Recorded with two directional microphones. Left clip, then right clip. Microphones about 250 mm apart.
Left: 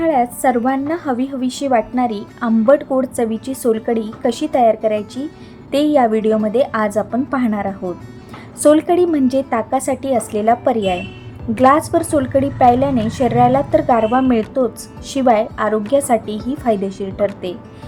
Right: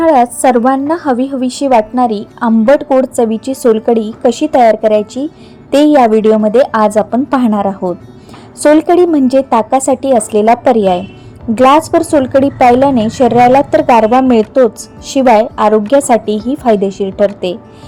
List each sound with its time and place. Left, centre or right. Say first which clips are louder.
0.0 s a woman's voice: right 7 dB; right